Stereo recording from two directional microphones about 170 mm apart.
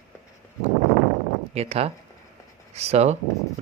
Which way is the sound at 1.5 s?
35° right (ahead or behind).